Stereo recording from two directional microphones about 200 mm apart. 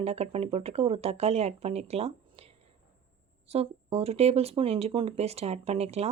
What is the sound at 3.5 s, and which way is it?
Speech, 30° right (ahead or behind).